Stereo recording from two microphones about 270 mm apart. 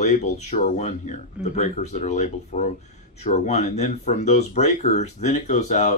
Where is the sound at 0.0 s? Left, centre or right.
Left.